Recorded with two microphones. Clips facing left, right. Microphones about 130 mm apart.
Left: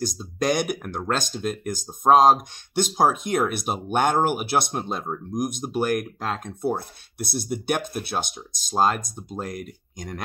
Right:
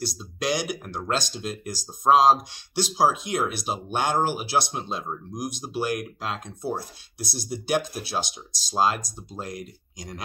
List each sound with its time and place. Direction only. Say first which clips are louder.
0.0 s speech: left 4 dB; 45° left (ahead or behind)